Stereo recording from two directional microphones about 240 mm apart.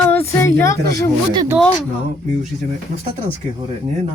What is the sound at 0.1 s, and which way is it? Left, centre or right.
Speech, centre.